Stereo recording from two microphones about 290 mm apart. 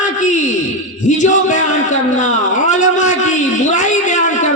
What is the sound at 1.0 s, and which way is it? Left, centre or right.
A man's voice, left.